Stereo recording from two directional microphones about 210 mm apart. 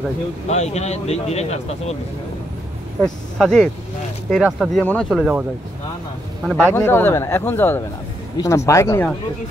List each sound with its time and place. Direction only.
0.5 s speech: 30° left (ahead or behind)
3.0 s speech: centre (ahead or behind)
6.4 s speech: centre (ahead or behind)
6.7 s speech: 10° left (ahead or behind)